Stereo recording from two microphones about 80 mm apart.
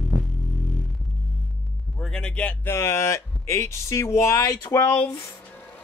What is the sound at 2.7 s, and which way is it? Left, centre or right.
Speech, left.